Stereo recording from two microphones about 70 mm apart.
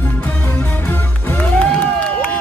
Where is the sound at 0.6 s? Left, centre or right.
Left.